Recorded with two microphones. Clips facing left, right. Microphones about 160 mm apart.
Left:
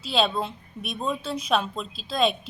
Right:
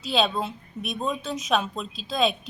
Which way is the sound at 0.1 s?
Centre (ahead or behind).